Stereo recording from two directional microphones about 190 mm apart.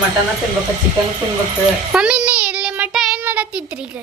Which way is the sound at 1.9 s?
5° right (ahead or behind).